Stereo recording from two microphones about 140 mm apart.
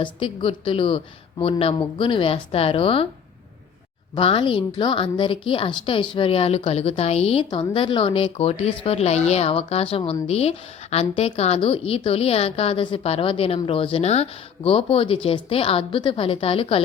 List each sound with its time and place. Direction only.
0.0 s a woman's voice: 40° left (ahead or behind)
4.1 s a woman's voice: 35° left (ahead or behind)
7.5 s a woman's voice: 35° left (ahead or behind)